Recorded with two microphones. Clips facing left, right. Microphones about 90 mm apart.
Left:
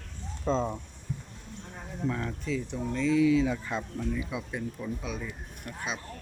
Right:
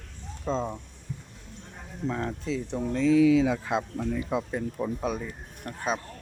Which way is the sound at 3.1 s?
90° right.